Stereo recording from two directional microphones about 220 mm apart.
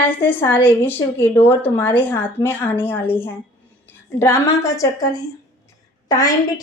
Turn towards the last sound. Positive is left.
turn(degrees=15)  # may be behind; listen again after turning